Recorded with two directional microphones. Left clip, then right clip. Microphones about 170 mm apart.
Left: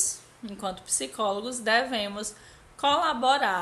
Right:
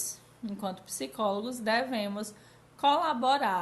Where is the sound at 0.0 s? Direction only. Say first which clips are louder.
Left 7 dB; 20° left (ahead or behind).